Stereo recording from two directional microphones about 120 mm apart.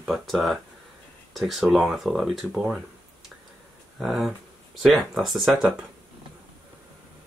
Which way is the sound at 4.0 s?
Centre (ahead or behind).